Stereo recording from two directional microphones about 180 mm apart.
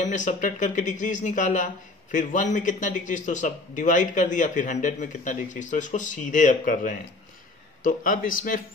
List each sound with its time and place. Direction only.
0.0 s speech: 45° left (ahead or behind)